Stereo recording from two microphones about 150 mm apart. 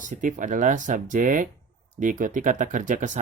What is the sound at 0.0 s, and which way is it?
Speech, 60° right (ahead or behind).